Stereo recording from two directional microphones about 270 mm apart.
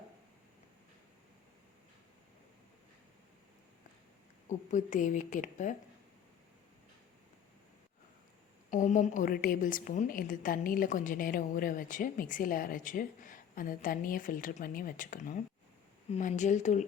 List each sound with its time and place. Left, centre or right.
4.4 s a woman's voice: left
8.7 s a woman's voice: left